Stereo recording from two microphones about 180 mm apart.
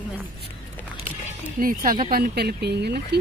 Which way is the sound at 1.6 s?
50° right (ahead or behind).